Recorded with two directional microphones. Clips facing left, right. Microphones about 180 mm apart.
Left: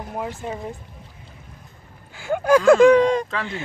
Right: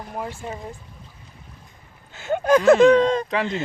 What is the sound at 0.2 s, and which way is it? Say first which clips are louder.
Speech: left 2 dB; 20° left (ahead or behind).